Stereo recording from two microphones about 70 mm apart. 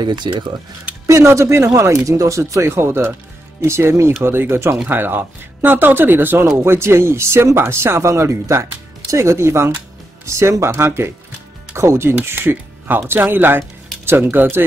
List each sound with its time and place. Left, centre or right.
0.0 s speech: right
1.0 s speech: right